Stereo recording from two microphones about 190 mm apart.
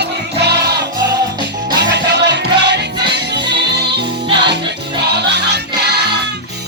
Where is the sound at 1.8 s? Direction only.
65° right (ahead or behind).